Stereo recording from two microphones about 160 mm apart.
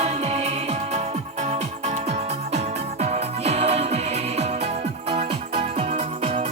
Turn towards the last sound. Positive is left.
turn(degrees=-35)  # may be behind; listen again after turning